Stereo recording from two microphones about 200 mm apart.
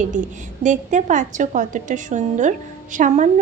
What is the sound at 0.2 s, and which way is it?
A woman's voice, 40° right (ahead or behind).